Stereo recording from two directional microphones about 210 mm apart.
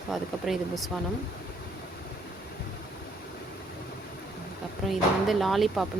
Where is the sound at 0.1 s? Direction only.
Centre (ahead or behind).